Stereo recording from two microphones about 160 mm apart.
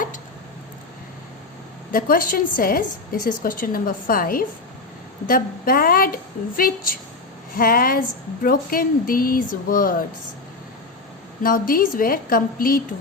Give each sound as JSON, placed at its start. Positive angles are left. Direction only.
{"t": 1.9, "sound": "a woman's voice", "side_deg": 60}
{"t": 11.4, "sound": "a woman's voice", "side_deg": 60}